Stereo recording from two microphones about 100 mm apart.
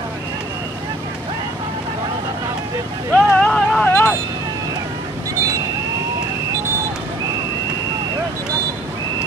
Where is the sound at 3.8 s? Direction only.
20° left (ahead or behind).